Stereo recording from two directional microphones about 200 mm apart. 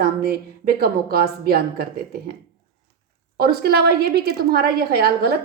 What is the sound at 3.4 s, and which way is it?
A woman's voice, 50° right (ahead or behind).